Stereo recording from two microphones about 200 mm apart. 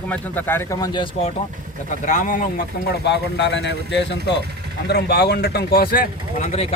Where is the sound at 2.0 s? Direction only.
40° left (ahead or behind).